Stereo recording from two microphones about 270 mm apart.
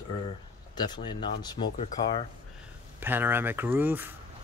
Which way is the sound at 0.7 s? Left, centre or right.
Centre.